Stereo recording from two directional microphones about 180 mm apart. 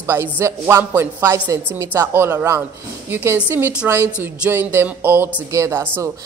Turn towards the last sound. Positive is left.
turn(degrees=-15)  # may be behind; listen again after turning